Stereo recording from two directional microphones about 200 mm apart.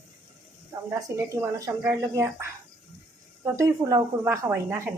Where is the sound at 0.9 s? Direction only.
15° right (ahead or behind).